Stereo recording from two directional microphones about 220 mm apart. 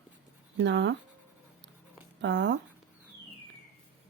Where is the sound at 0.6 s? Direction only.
55° right (ahead or behind).